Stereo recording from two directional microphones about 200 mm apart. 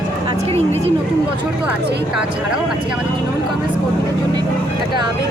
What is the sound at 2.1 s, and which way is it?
Speech, 5° right (ahead or behind).